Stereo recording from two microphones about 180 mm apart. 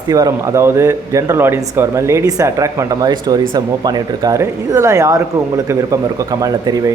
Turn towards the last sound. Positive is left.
turn(degrees=-20)  # may be behind; listen again after turning